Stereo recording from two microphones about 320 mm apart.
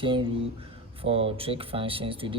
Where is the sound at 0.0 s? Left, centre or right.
Centre.